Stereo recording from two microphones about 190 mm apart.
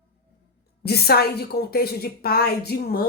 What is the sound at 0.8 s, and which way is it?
A woman's voice, 55° left (ahead or behind).